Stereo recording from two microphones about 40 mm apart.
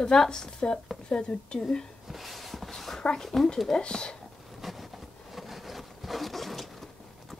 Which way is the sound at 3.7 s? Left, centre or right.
Left.